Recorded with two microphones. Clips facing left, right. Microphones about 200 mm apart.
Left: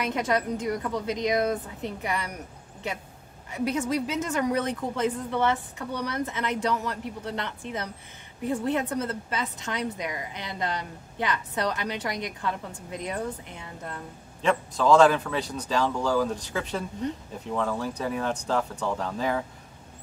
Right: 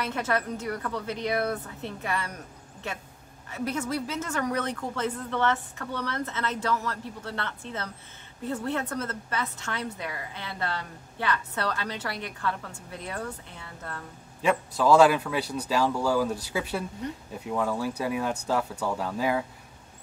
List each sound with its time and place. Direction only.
0.0 s a woman's voice: 15° left (ahead or behind)
14.4 s speech: 10° right (ahead or behind)